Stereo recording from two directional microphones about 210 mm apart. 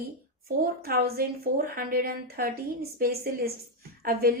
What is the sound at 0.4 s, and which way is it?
A woman's voice, 45° right (ahead or behind).